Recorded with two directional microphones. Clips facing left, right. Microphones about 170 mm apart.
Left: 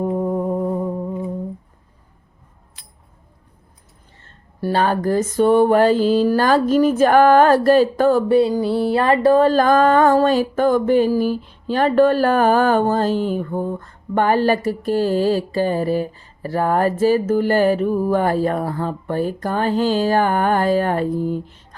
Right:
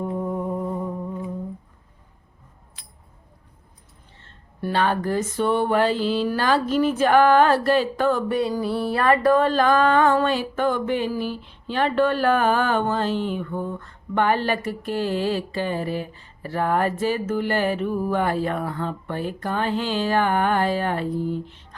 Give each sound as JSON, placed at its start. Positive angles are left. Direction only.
{"t": 0.0, "sound": "music", "side_deg": 40}
{"t": 0.5, "sound": "humming", "side_deg": 25}
{"t": 4.2, "sound": "speech", "side_deg": 40}